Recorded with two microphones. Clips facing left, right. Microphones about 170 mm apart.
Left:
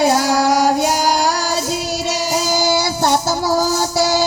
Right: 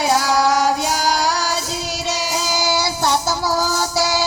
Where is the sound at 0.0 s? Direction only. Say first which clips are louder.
Left 2 dB; 50° left (ahead or behind).